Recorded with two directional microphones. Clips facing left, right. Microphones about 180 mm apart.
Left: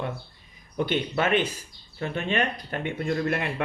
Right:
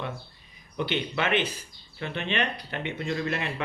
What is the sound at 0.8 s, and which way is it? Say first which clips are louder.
Speech: left 3 dB; 45° left (ahead or behind).